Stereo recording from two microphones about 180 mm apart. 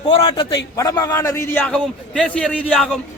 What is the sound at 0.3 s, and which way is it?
A man's voice, 25° left (ahead or behind).